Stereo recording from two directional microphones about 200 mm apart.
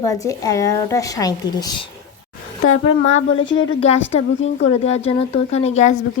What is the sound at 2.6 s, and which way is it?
Speech, 90° left.